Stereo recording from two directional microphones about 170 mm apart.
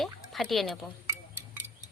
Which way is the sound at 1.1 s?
10° right (ahead or behind).